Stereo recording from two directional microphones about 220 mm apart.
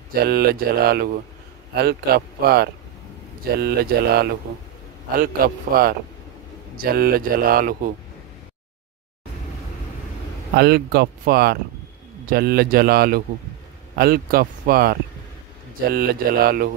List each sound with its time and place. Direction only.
0.1 s speech: 45° right (ahead or behind)
10.5 s speech: 45° right (ahead or behind)